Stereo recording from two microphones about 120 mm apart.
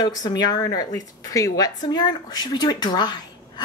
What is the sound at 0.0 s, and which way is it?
A woman's voice, 35° left (ahead or behind).